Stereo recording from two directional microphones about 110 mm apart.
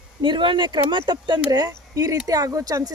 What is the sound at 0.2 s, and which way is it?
Speech, 45° right (ahead or behind).